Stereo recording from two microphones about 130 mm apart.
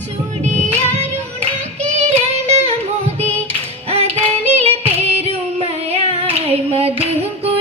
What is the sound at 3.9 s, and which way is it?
Music, 55° right (ahead or behind).